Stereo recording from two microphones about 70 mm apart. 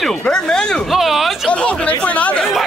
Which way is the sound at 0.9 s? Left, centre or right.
Centre.